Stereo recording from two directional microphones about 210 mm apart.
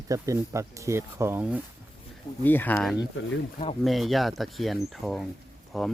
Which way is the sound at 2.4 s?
10° left (ahead or behind).